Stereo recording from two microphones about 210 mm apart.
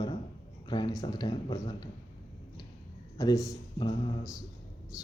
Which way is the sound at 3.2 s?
15° left (ahead or behind).